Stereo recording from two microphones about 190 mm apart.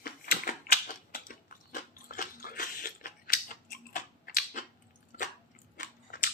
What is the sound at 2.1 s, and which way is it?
Biting, 45° left (ahead or behind).